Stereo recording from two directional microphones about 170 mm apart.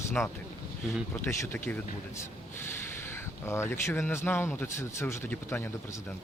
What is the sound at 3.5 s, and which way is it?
Speech, 15° left (ahead or behind).